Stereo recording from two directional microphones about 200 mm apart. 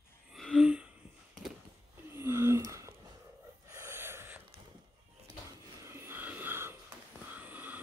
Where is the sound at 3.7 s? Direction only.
15° right (ahead or behind).